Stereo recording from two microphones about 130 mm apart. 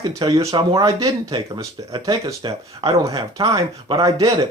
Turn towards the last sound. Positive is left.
turn(degrees=-30)  # may be behind; listen again after turning